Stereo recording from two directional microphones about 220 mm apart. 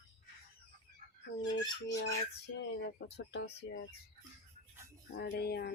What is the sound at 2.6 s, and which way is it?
Speech, 50° left (ahead or behind).